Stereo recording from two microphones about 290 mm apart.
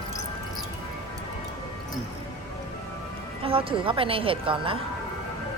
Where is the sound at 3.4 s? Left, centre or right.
Centre.